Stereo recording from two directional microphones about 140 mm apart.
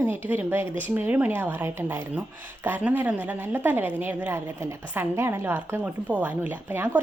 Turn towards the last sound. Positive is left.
turn(degrees=-15)  # may be behind; listen again after turning